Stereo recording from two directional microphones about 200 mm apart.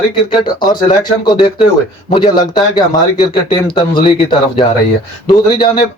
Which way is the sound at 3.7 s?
25° left (ahead or behind).